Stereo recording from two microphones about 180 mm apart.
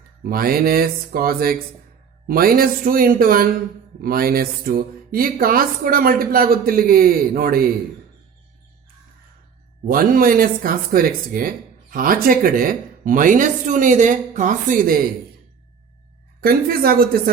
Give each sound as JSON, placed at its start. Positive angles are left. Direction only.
{"t": 0.2, "sound": "a woman's voice", "side_deg": -55}
{"t": 9.8, "sound": "speech", "side_deg": -50}
{"t": 16.4, "sound": "a woman's voice", "side_deg": -55}